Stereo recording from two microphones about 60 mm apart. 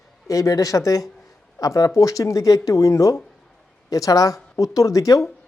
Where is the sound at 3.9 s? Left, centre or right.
Left.